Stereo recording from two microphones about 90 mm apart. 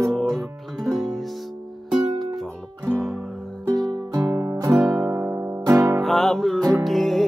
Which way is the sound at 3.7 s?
45° right (ahead or behind).